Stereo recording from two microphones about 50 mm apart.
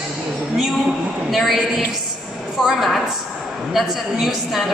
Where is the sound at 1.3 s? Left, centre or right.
Centre.